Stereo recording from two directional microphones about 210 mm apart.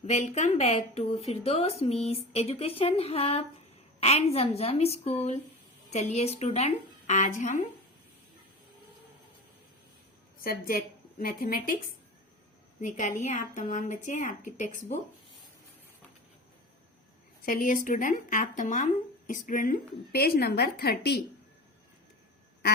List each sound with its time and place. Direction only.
0.0 s a woman's voice: 35° left (ahead or behind)
10.4 s a woman's voice: 45° left (ahead or behind)
12.8 s a woman's voice: 35° left (ahead or behind)
17.4 s a woman's voice: 40° left (ahead or behind)